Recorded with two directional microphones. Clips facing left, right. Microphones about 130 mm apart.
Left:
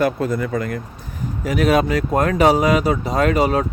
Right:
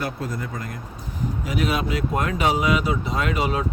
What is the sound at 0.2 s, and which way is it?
Speech, 60° left (ahead or behind).